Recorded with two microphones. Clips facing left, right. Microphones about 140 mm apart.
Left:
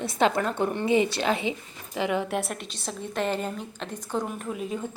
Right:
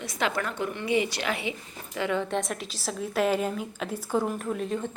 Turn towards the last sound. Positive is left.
turn(degrees=5)  # may be behind; listen again after turning